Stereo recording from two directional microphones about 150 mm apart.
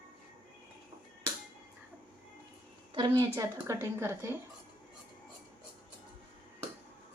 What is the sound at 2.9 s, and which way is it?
A woman's voice, 30° right (ahead or behind).